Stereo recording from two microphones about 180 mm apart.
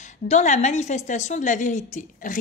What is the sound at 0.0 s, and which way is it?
A woman's voice, 40° left (ahead or behind).